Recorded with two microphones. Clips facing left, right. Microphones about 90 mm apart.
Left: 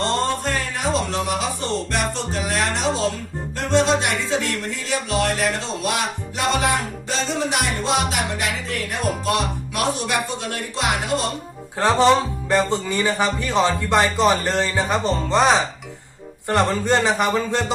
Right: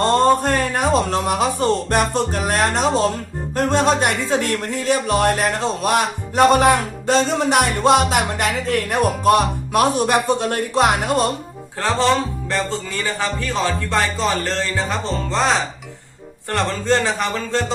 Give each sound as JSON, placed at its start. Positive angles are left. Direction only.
{"t": 0.0, "sound": "a man's voice", "side_deg": -50}
{"t": 3.5, "sound": "music", "side_deg": -50}
{"t": 11.8, "sound": "speech", "side_deg": 20}